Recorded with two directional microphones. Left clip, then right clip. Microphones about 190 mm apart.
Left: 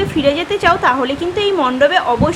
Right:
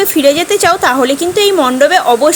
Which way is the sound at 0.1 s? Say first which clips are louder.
Right 6 dB; 35° right (ahead or behind).